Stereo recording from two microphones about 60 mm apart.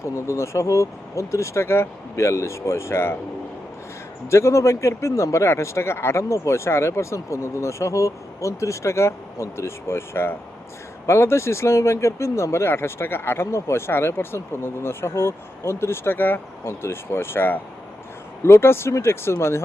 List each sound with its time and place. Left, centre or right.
0.0 s speech: left
4.3 s speech: left